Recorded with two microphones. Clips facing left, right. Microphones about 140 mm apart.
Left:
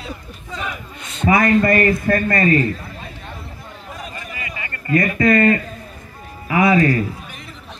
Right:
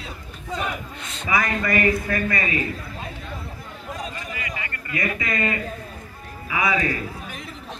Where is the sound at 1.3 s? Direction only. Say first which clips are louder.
Left 9 dB; 55° left (ahead or behind).